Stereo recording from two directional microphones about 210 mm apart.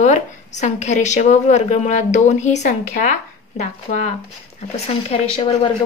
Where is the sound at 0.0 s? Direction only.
35° left (ahead or behind).